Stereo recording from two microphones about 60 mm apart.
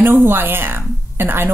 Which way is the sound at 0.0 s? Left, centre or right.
Right.